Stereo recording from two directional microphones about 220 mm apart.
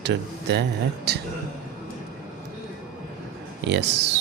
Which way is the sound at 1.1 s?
50° right (ahead or behind).